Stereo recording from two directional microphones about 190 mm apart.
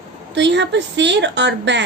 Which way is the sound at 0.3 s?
70° right (ahead or behind).